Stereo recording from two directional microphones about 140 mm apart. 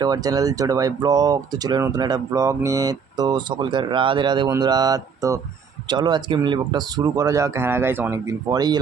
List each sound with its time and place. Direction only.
0.0 s speech: 25° right (ahead or behind)